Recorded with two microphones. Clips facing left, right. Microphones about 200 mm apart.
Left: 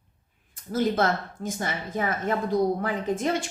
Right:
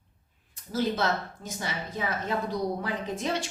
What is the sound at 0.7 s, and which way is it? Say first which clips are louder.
A woman's voice: left 3 dB; 50° left (ahead or behind).